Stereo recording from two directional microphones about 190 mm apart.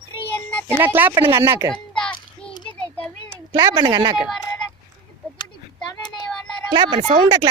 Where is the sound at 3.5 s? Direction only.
25° right (ahead or behind).